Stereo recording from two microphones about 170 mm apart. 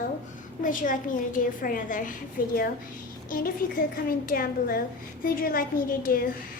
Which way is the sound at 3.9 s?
60° left (ahead or behind).